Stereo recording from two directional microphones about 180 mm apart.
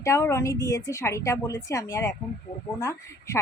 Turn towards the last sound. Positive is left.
turn(degrees=15)  # may be behind; listen again after turning